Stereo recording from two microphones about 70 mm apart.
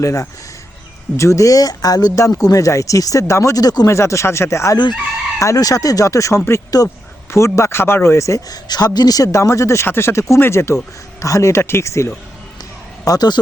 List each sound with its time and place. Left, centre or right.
0.0 s speech: left
3.8 s speech: left
6.8 s speech: left
7.3 s speech: left
8.4 s speech: left
9.8 s speech: left
11.2 s speech: left
13.1 s speech: left